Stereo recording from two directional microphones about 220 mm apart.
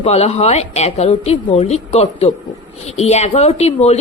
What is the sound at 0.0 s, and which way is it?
A woman's voice, 30° left (ahead or behind).